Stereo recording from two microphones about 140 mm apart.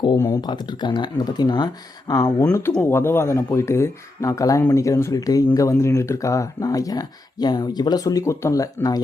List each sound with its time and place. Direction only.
0.4 s speech: 30° left (ahead or behind)